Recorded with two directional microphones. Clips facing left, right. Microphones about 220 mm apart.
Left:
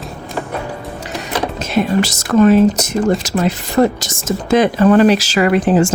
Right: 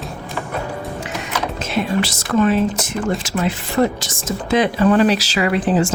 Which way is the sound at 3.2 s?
40° left (ahead or behind).